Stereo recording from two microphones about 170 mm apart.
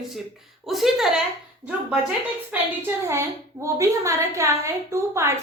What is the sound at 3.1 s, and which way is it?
A child's voice, 15° right (ahead or behind).